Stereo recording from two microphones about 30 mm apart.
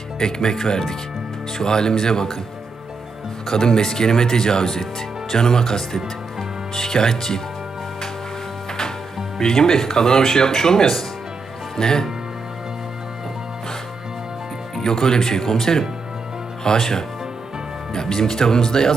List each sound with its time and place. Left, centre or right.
0.2 s speech: centre
3.4 s speech: centre
9.4 s speech: centre
14.8 s speech: centre